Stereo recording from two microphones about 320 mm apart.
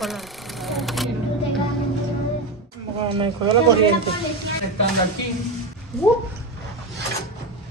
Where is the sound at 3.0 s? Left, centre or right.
Centre.